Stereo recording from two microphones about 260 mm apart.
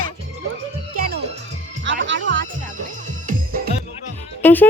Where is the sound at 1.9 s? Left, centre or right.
Right.